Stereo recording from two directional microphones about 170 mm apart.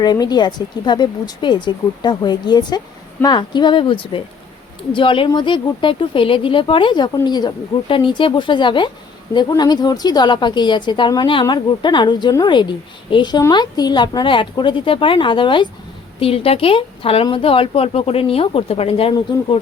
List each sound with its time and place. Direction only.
0.0 s a woman's voice: 25° left (ahead or behind)